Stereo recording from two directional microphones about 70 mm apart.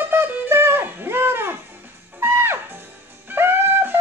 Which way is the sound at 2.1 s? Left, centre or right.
Right.